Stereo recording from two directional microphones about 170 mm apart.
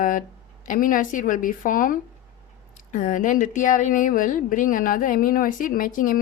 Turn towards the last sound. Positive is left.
turn(degrees=50)  # may be behind; listen again after turning